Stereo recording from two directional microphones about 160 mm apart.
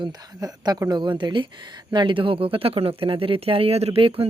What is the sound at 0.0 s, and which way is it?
Speech, 25° right (ahead or behind).